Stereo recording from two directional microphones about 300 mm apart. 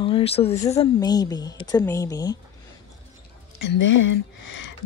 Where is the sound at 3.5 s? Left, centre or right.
Left.